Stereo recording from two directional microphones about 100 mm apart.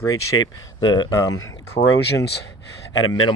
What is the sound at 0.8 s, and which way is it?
Speech, 45° left (ahead or behind).